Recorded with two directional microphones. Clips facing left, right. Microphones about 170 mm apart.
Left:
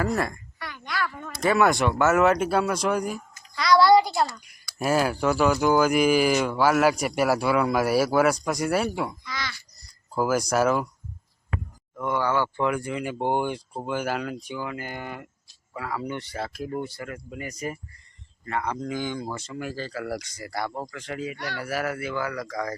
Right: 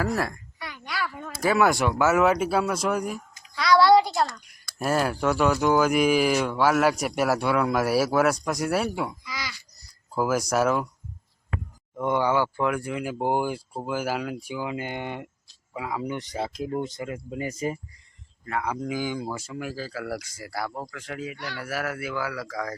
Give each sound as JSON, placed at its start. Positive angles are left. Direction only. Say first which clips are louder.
{"t": 0.0, "sound": "speech", "louder": "left 1 dB", "side_deg": -5}
{"t": 11.9, "sound": "speech", "louder": "right 2 dB", "side_deg": -20}
{"t": 12.5, "sound": "speech", "louder": "even", "side_deg": 0}
{"t": 18.4, "sound": "speech", "louder": "even", "side_deg": -5}